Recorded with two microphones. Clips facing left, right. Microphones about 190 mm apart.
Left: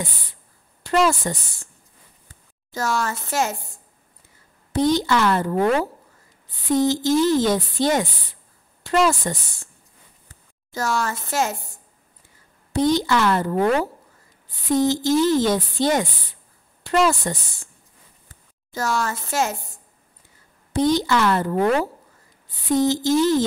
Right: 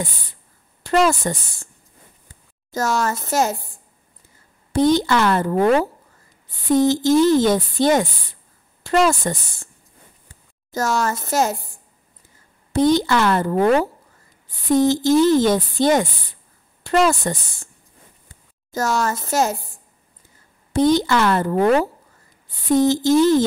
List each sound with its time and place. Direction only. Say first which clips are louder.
0.8 s speech: right 2 dB; 50° right (ahead or behind)
2.7 s speech: right 3 dB; 45° right (ahead or behind)
4.7 s speech: right 3 dB; 55° right (ahead or behind)
10.7 s speech: right 3 dB; 45° right (ahead or behind)
12.7 s speech: right 3 dB; 55° right (ahead or behind)
14.7 s speech: right 3 dB; 50° right (ahead or behind)
18.7 s speech: right 3 dB; 45° right (ahead or behind)
20.7 s speech: right 3 dB; 55° right (ahead or behind)
22.7 s speech: right 3 dB; 50° right (ahead or behind)